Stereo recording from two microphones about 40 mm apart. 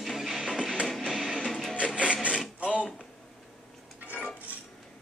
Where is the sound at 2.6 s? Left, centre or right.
Right.